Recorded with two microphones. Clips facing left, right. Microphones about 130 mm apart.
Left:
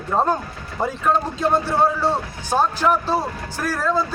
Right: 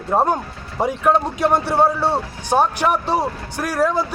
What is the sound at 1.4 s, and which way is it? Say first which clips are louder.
Speech: right 2 dB; 65° right (ahead or behind).